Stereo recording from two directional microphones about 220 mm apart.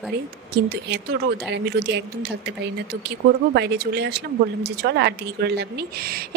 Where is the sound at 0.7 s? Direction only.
50° right (ahead or behind).